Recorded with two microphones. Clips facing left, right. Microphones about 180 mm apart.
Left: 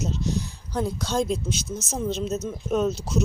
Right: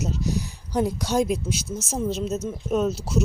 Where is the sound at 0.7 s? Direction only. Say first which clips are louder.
Right 3 dB; 15° right (ahead or behind).